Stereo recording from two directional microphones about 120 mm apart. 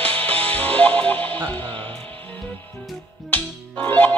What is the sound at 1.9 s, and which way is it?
Music, 10° left (ahead or behind).